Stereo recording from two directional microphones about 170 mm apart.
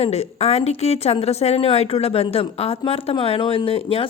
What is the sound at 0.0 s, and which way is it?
Speech, 40° left (ahead or behind).